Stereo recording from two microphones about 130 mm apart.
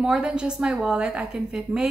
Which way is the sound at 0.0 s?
5° right (ahead or behind).